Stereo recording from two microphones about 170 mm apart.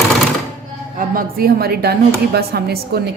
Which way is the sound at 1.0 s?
60° right (ahead or behind).